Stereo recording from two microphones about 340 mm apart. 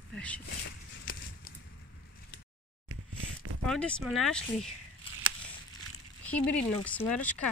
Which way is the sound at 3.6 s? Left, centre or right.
Centre.